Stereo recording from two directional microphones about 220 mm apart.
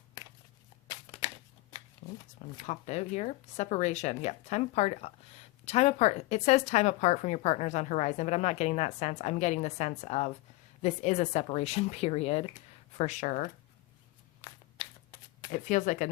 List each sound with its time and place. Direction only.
2.6 s speech: 30° left (ahead or behind)
14.4 s a sound: 20° left (ahead or behind)
14.8 s shuffling cards: 20° left (ahead or behind)
15.5 s speech: 35° left (ahead or behind)